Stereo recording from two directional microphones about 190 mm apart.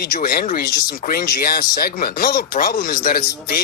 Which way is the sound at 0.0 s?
50° left (ahead or behind).